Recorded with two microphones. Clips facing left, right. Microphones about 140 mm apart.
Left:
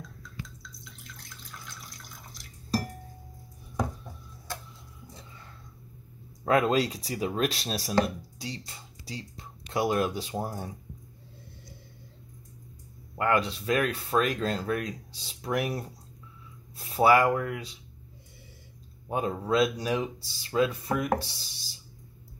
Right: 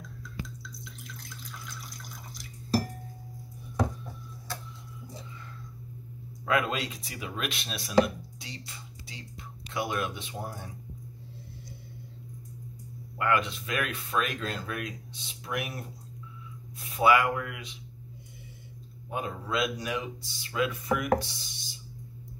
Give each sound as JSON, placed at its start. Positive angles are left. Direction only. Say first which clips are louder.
{"t": 0.8, "sound": "water", "louder": "right 4 dB", "side_deg": 0}
{"t": 6.4, "sound": "speech", "louder": "left 5 dB", "side_deg": 35}
{"t": 13.2, "sound": "speech", "louder": "left 2 dB", "side_deg": 35}
{"t": 19.0, "sound": "speech", "louder": "left 5 dB", "side_deg": 35}